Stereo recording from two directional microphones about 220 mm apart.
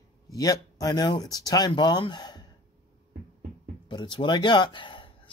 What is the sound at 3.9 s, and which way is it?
Speech, 20° left (ahead or behind).